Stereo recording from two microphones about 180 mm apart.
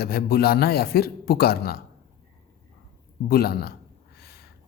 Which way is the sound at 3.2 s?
60° left (ahead or behind).